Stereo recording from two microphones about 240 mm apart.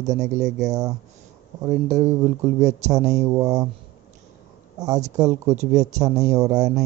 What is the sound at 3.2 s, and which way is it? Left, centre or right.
Speech, centre.